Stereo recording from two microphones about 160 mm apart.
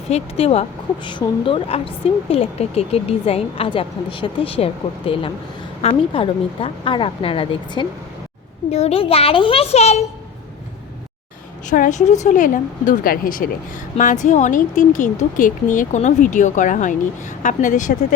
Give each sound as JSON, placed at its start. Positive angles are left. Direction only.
{"t": 0.1, "sound": "a woman's voice", "side_deg": 40}
{"t": 11.7, "sound": "speech", "side_deg": 50}